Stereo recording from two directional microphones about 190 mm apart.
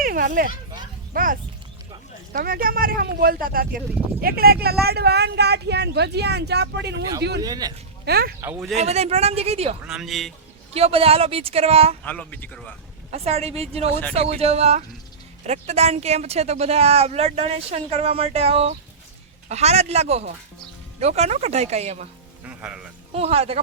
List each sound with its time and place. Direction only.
0.0 s children playing: 50° right (ahead or behind)
1.1 s speech: 45° right (ahead or behind); by 7.4 s 60° right (ahead or behind)
7.4 s speech: 20° right (ahead or behind)
8.0 s speech: 55° right (ahead or behind)
8.4 s speech: 10° right (ahead or behind)
8.7 s speech: 35° right (ahead or behind)
9.8 s speech: 5° right (ahead or behind)
10.8 s speech: 30° right (ahead or behind)
12.0 s speech: 10° left (ahead or behind)
13.1 s speech: 35° right (ahead or behind)
22.4 s speech: 5° right (ahead or behind)
23.1 s speech: 30° right (ahead or behind)